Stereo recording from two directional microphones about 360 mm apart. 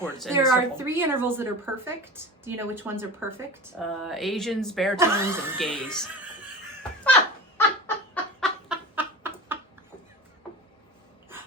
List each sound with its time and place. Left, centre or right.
0.0 s speech: centre
7.9 s a sound: centre
9.0 s chicken: centre